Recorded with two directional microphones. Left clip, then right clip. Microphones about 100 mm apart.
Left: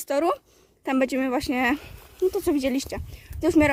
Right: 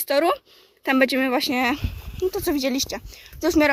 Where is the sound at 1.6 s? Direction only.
55° left (ahead or behind).